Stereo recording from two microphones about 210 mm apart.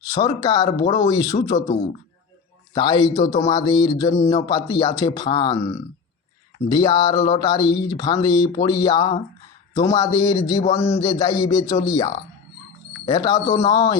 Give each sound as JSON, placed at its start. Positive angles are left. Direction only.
{"t": 0.1, "sound": "a man's voice", "side_deg": 15}
{"t": 2.7, "sound": "a man's voice", "side_deg": 20}